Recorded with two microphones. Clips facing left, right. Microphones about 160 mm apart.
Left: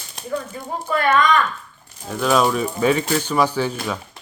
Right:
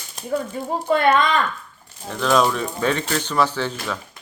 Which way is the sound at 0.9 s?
25° right (ahead or behind).